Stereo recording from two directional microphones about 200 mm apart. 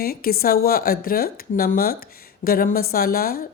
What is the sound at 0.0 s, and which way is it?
Speech, 50° left (ahead or behind).